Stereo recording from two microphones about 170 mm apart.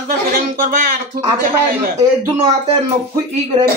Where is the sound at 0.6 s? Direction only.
55° right (ahead or behind).